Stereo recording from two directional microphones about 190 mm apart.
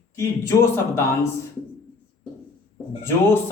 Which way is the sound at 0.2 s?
15° left (ahead or behind).